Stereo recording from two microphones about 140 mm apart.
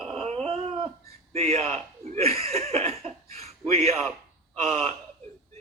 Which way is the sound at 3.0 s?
50° right (ahead or behind).